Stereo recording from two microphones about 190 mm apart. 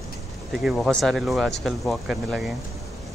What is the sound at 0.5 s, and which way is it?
Speech, centre (ahead or behind).